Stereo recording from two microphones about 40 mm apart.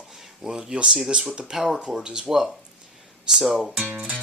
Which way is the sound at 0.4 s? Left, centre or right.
Right.